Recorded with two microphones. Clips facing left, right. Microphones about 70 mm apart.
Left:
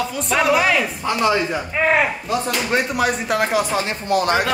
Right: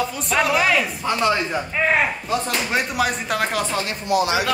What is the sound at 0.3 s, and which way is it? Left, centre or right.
Speech, centre.